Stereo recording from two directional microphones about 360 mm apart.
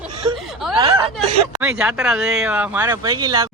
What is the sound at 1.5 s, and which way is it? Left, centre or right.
Speech, centre.